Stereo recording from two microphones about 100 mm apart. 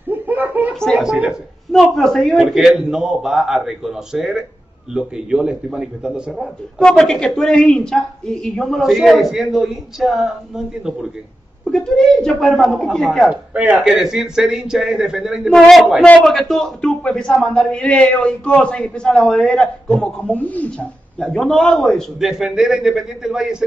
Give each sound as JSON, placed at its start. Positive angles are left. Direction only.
{"t": 0.1, "sound": "a sound", "side_deg": -20}
{"t": 0.9, "sound": "a man's voice", "side_deg": -15}
{"t": 1.7, "sound": "a woman's voice", "side_deg": 0}
{"t": 6.3, "sound": "a woman's voice", "side_deg": 5}
{"t": 11.6, "sound": "a woman's voice", "side_deg": 5}
{"t": 13.3, "sound": "a man's voice", "side_deg": -15}